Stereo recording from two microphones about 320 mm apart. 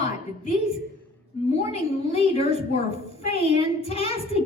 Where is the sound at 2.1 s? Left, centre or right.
Centre.